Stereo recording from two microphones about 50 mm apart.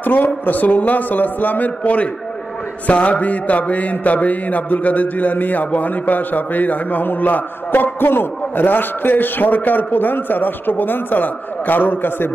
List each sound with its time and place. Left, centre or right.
0.0 s mantra: left